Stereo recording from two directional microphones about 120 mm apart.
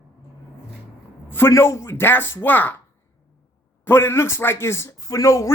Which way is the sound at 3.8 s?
20° left (ahead or behind).